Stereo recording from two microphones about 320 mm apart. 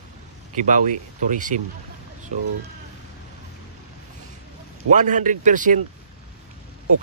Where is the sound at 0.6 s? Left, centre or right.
Right.